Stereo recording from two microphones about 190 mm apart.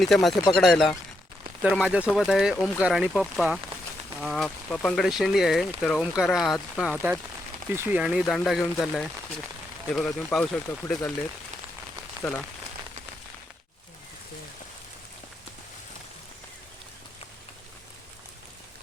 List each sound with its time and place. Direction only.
0.0 s speech: centre (ahead or behind)
12.2 s rain on surface: 20° right (ahead or behind)